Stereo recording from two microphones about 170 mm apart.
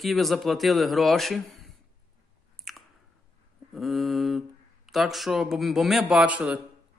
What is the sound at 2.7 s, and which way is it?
Chewing, centre (ahead or behind).